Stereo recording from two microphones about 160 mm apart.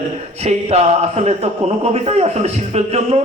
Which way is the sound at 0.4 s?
40° right (ahead or behind).